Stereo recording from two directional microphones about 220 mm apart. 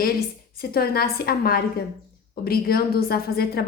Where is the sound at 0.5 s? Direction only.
45° left (ahead or behind).